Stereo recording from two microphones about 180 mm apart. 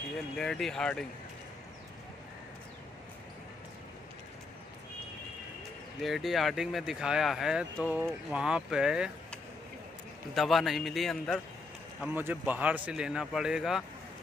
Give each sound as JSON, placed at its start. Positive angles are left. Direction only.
{"t": 0.4, "sound": "speech", "side_deg": 5}
{"t": 5.9, "sound": "speech", "side_deg": 0}
{"t": 10.3, "sound": "speech", "side_deg": 0}
{"t": 12.0, "sound": "speech", "side_deg": -10}